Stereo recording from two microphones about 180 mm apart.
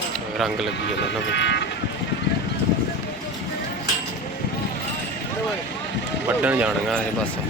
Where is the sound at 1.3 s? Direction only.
75° left (ahead or behind).